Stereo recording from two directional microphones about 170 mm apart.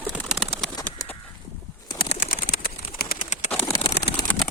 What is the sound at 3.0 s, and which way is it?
Bird, 60° left (ahead or behind).